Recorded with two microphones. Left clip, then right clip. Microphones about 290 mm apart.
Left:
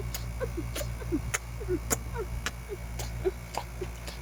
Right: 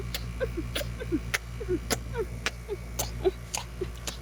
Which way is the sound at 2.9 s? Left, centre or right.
Centre.